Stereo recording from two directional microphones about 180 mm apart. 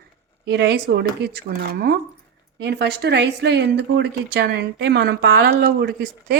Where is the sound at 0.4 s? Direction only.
65° right (ahead or behind).